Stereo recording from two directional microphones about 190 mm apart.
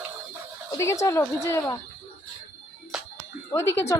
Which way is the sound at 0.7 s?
15° left (ahead or behind).